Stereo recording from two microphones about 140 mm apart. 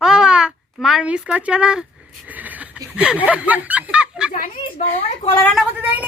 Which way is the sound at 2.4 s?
10° right (ahead or behind).